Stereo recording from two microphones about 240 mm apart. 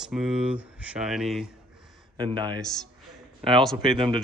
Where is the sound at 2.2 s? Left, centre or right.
Centre.